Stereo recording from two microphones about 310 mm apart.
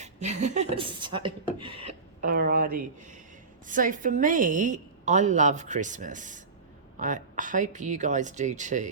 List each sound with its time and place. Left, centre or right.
0.0 s speech: right
2.2 s a woman's voice: right